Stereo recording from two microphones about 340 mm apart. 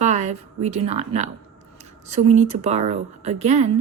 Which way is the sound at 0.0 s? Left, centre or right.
Centre.